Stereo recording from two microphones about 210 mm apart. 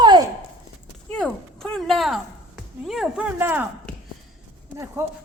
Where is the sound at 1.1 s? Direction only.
5° left (ahead or behind).